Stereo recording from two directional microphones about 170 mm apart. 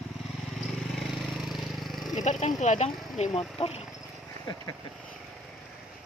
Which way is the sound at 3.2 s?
40° left (ahead or behind).